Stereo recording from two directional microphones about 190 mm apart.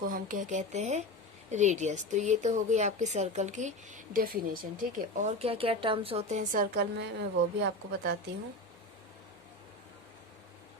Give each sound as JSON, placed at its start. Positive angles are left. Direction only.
{"t": 0.0, "sound": "a woman's voice", "side_deg": -45}